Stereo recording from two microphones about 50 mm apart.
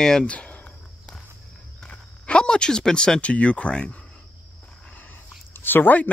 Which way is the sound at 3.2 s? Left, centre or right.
Left.